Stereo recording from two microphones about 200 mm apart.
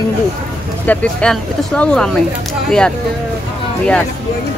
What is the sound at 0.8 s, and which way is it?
Speech, 5° left (ahead or behind).